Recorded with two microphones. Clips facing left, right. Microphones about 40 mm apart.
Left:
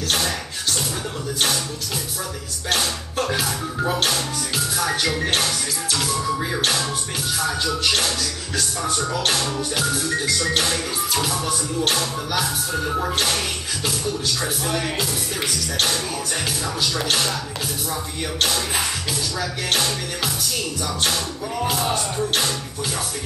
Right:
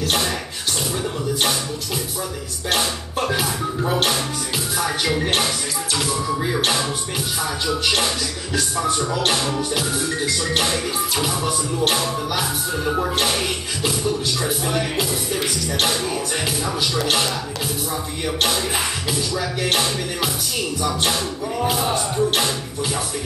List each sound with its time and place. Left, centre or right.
0.0 s music: centre
2.7 s music: centre
9.1 s music: centre
14.4 s music: centre
16.9 s music: centre
19.6 s music: centre